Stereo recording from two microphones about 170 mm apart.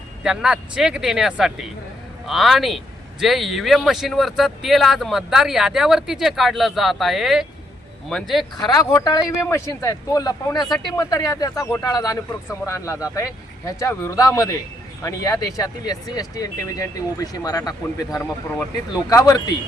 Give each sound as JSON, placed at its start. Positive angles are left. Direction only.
{"t": 0.2, "sound": "speech", "side_deg": -5}
{"t": 8.5, "sound": "speech", "side_deg": 25}